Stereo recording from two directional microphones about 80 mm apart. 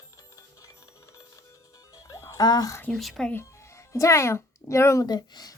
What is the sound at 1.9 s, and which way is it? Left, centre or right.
Music, left.